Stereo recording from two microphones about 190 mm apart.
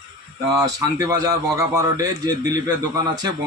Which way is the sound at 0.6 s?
15° right (ahead or behind).